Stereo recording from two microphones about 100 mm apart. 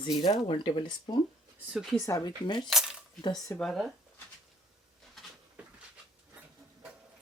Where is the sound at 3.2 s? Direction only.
45° left (ahead or behind).